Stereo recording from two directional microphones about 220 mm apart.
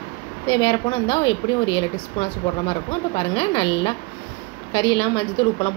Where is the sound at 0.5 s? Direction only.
20° left (ahead or behind).